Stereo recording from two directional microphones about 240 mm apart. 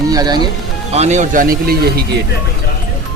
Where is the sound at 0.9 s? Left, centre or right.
Right.